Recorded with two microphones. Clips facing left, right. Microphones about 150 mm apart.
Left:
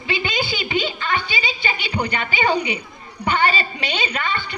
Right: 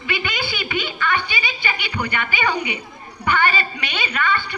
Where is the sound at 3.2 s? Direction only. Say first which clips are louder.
Even; 25° left (ahead or behind).